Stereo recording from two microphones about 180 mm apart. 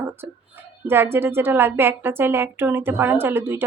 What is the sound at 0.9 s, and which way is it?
A woman's voice, 15° right (ahead or behind).